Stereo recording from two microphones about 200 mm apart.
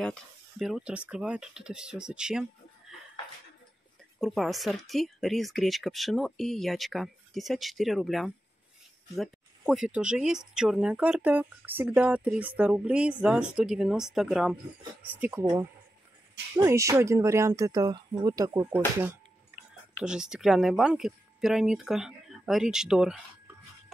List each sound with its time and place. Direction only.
0.0 s speech: centre (ahead or behind)
4.2 s speech: centre (ahead or behind)
16.6 s speech: 15° right (ahead or behind)
20.0 s speech: 5° right (ahead or behind)